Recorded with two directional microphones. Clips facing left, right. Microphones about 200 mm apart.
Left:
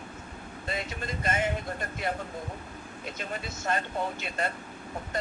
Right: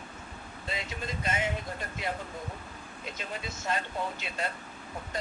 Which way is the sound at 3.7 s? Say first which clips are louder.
Left 2 dB; 55° left (ahead or behind).